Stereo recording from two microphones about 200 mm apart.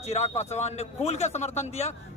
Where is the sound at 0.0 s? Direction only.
35° left (ahead or behind).